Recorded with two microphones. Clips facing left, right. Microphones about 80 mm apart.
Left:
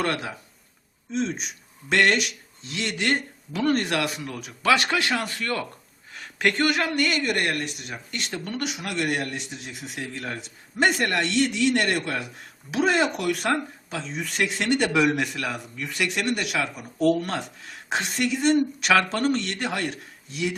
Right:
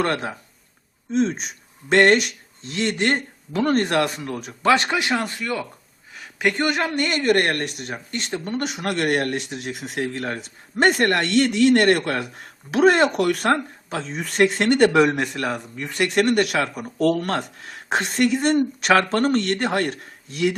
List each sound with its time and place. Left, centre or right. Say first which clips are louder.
0.0 s speech: right 4 dB; right
4.9 s speech: right 2 dB; centre
5.1 s speech: right 3 dB; right
5.4 s speech: right 2 dB; centre
6.1 s a sound: right 2 dB; centre
6.6 s speech: right 1 dB; right
7.9 s speech: right 3 dB; right